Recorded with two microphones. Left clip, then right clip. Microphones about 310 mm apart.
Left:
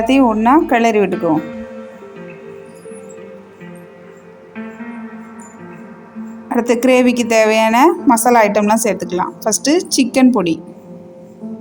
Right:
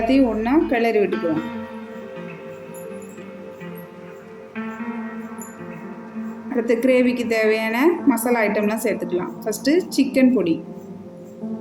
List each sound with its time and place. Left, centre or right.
0.1 s a woman's voice: left
1.1 s speech: centre
4.5 s music: centre
6.6 s a woman's voice: left